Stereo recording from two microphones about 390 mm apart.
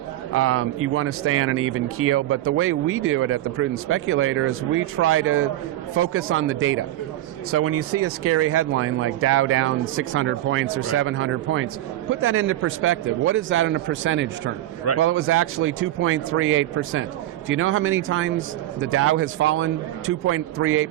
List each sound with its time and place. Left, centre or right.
0.3 s a man's voice: right